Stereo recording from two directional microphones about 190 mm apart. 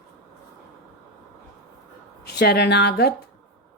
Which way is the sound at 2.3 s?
60° left (ahead or behind).